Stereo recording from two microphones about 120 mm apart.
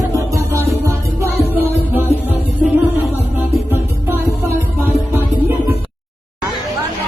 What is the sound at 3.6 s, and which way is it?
Music, 15° right (ahead or behind).